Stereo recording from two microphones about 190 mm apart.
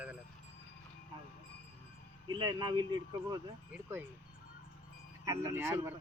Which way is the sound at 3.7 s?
10° right (ahead or behind).